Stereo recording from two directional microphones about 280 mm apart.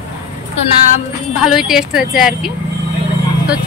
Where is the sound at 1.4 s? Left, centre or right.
Centre.